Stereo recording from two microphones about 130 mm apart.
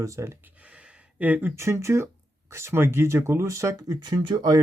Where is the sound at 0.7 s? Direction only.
10° right (ahead or behind).